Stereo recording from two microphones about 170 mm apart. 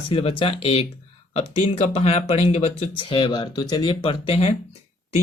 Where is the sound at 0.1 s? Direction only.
35° left (ahead or behind).